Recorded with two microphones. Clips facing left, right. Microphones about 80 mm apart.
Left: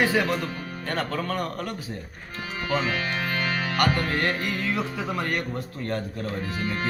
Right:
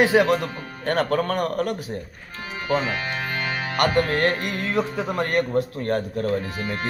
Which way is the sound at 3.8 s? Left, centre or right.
Right.